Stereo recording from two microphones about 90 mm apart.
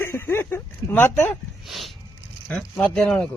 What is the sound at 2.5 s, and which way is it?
Speech, 10° left (ahead or behind).